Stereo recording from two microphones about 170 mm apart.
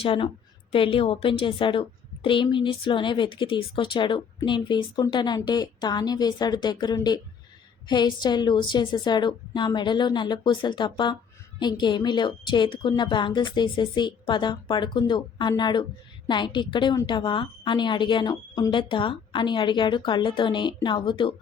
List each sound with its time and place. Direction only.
0.0 s a woman's voice: 30° left (ahead or behind)